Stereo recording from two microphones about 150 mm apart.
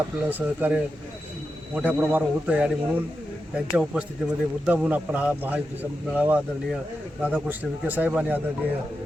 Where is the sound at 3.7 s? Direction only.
5° right (ahead or behind).